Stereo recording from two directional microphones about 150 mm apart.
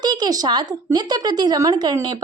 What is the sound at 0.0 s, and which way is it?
Speech, 30° right (ahead or behind).